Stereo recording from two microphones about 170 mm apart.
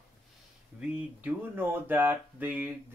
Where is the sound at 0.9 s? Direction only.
10° right (ahead or behind).